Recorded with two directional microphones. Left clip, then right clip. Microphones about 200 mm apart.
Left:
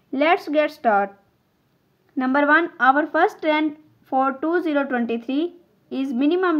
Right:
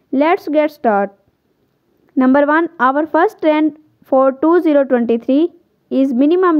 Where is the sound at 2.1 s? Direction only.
50° right (ahead or behind).